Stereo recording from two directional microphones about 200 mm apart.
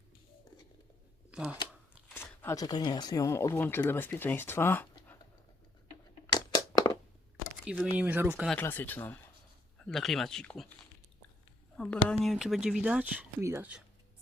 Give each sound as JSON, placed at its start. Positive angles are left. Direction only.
{"t": 1.3, "sound": "speech", "side_deg": -5}
{"t": 2.1, "sound": "speech", "side_deg": 10}
{"t": 6.2, "sound": "a sound", "side_deg": 20}
{"t": 7.6, "sound": "speech", "side_deg": 0}
{"t": 8.4, "sound": "speech", "side_deg": 10}
{"t": 11.8, "sound": "speech", "side_deg": 5}